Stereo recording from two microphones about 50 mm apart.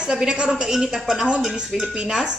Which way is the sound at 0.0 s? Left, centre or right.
Centre.